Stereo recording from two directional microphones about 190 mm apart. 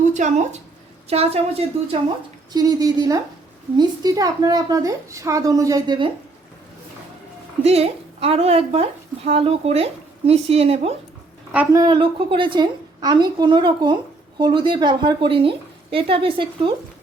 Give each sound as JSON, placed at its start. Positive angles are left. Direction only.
{"t": 0.0, "sound": "a woman's voice", "side_deg": -40}
{"t": 2.5, "sound": "a woman's voice", "side_deg": -20}
{"t": 7.6, "sound": "a woman's voice", "side_deg": -30}
{"t": 11.7, "sound": "a woman's voice", "side_deg": -20}